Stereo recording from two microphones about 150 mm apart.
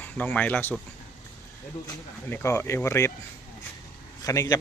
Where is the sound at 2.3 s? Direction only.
15° left (ahead or behind).